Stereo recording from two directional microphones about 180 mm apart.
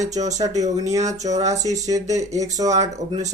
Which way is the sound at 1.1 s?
40° right (ahead or behind).